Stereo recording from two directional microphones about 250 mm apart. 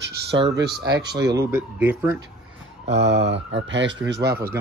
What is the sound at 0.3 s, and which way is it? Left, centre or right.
Speech, right.